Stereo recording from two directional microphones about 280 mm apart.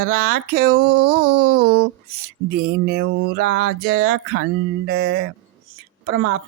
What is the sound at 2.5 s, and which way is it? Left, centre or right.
Speech, right.